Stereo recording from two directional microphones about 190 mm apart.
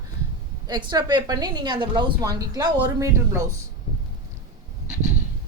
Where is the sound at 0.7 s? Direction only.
20° right (ahead or behind).